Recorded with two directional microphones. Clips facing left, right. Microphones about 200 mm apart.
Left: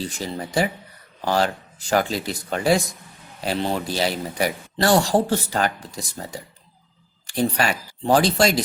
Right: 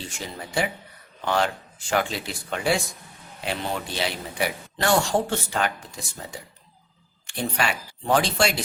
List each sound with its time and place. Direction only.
0.3 s a man's voice: 40° left (ahead or behind)
7.3 s a man's voice: 40° left (ahead or behind)